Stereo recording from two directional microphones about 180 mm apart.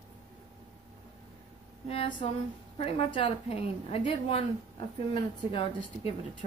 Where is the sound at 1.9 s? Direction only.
30° left (ahead or behind).